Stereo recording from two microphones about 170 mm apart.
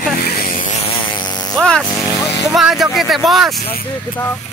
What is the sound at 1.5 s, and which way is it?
Speech, 5° left (ahead or behind).